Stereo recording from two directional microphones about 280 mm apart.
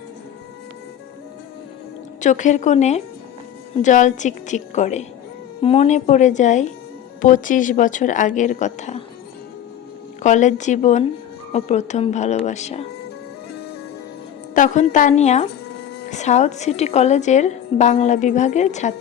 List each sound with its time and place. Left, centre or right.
2.2 s a woman's voice: left
10.2 s a woman's voice: left
14.5 s a woman's voice: left